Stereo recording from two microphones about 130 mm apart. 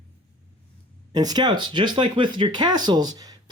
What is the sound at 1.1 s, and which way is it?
Speech, 30° right (ahead or behind).